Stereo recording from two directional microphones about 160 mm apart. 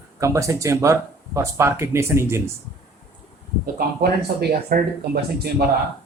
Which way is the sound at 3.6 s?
75° right (ahead or behind).